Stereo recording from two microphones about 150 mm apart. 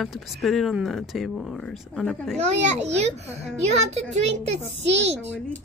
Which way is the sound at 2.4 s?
50° right (ahead or behind).